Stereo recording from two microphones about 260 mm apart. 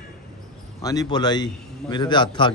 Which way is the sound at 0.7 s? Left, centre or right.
Centre.